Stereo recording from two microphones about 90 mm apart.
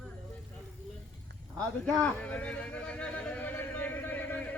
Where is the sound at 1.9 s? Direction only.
10° left (ahead or behind).